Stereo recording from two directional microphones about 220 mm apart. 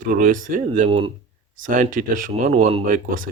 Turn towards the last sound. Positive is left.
turn(degrees=-35)  # may be behind; listen again after turning